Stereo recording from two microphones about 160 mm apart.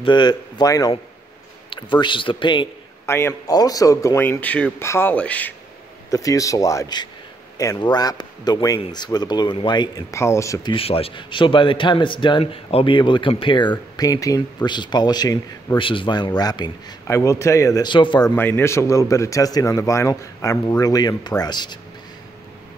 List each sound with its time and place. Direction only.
0.0 s a man's voice: 25° left (ahead or behind)
3.1 s speech: 15° left (ahead or behind)
6.0 s a man's voice: 20° left (ahead or behind)
10.7 s a man's voice: 35° left (ahead or behind)
18.3 s a man's voice: 15° left (ahead or behind)